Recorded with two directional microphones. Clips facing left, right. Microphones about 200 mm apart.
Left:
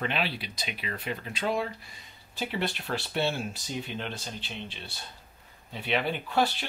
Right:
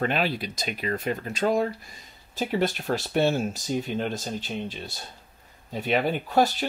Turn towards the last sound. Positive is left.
turn(degrees=-45)  # may be behind; listen again after turning